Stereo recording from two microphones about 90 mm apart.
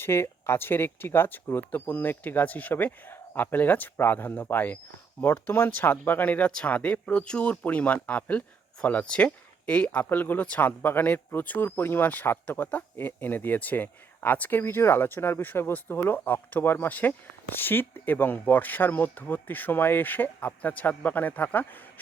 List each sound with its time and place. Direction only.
0.0 s speech: 25° left (ahead or behind)